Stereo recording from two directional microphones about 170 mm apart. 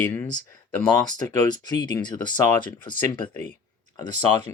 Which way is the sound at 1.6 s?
25° left (ahead or behind).